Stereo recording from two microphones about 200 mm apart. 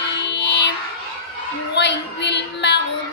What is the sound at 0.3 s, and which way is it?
Music, 60° left (ahead or behind).